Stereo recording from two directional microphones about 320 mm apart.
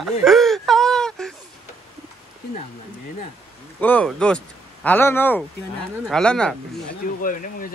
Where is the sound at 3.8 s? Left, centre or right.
Centre.